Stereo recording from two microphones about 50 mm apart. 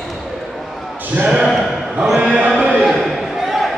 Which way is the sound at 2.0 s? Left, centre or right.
Centre.